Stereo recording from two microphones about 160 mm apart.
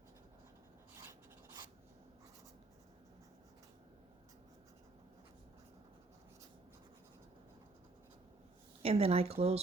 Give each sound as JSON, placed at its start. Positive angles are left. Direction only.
{"t": 8.8, "sound": "speech", "side_deg": -40}